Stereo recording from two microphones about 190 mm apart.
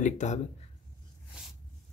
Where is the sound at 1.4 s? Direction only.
5° right (ahead or behind).